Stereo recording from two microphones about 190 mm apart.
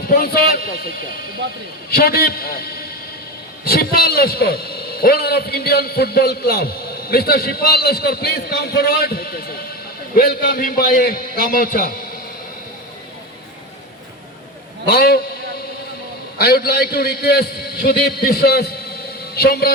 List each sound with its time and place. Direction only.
0.0 s a man's voice: 50° left (ahead or behind)
14.8 s a man's voice: 55° left (ahead or behind)
16.4 s a man's voice: 55° left (ahead or behind)